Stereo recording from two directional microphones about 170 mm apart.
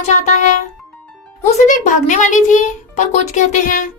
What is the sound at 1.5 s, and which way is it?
A child's voice, 45° left (ahead or behind).